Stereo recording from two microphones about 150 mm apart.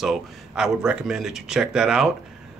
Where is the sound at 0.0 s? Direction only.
5° right (ahead or behind).